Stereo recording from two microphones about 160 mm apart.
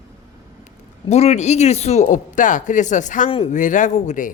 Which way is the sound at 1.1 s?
45° left (ahead or behind).